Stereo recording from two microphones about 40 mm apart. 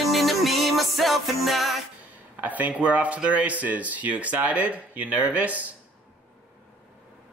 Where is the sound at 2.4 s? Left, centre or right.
Right.